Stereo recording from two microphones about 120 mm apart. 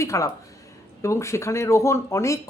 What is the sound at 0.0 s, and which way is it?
A woman's voice, 25° left (ahead or behind).